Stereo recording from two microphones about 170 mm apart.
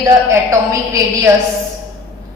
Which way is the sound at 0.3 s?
20° right (ahead or behind).